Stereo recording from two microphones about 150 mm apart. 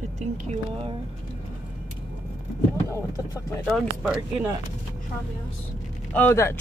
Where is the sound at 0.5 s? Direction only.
40° right (ahead or behind).